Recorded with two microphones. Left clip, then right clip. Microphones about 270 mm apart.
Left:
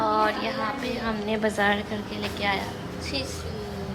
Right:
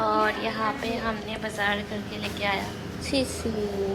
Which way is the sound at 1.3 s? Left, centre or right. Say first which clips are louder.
Left 6 dB; centre.